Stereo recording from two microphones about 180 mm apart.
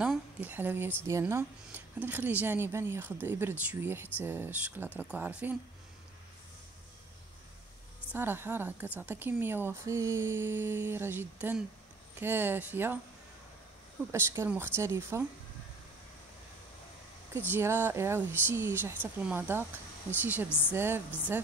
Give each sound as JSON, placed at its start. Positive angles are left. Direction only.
{"t": 0.0, "sound": "a woman's voice", "side_deg": -5}
{"t": 8.1, "sound": "speech", "side_deg": -10}
{"t": 14.1, "sound": "speech", "side_deg": -15}
{"t": 17.5, "sound": "speech", "side_deg": -15}
{"t": 20.4, "sound": "a woman's voice", "side_deg": 10}
{"t": 20.7, "sound": "speech", "side_deg": -10}